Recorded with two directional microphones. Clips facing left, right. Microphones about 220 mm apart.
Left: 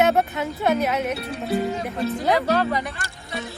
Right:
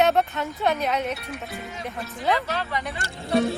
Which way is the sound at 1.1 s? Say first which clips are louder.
Left 9 dB; 30° left (ahead or behind).